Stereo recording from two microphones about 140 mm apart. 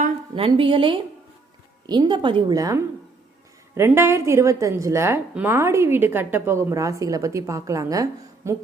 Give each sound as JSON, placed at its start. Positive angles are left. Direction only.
{"t": 0.3, "sound": "a woman's voice", "side_deg": -40}